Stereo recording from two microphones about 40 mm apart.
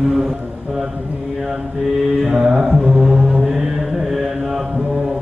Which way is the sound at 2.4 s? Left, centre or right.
Centre.